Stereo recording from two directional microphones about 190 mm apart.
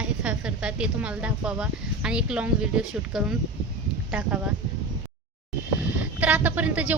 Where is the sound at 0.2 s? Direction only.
5° right (ahead or behind).